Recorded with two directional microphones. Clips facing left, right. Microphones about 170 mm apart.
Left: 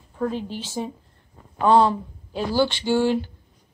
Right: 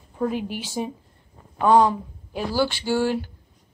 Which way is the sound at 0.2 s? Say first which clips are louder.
Right 1 dB; 10° right (ahead or behind).